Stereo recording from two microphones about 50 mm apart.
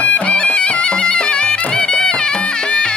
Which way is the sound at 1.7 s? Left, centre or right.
Centre.